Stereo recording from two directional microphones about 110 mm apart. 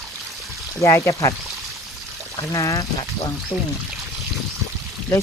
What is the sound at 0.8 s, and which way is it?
Speech, 25° left (ahead or behind).